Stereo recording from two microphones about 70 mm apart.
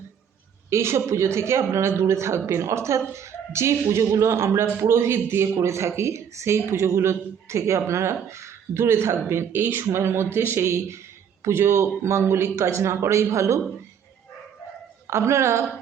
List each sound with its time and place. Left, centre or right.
0.7 s speech: right
15.0 s a woman's voice: right